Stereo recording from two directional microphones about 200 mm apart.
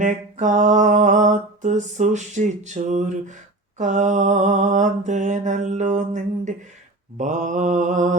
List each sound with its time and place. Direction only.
0.0 s music: 40° right (ahead or behind)